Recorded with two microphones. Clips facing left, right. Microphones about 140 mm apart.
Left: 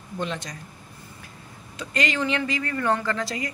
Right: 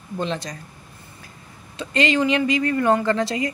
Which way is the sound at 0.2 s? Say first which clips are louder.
Right 4 dB; 35° right (ahead or behind).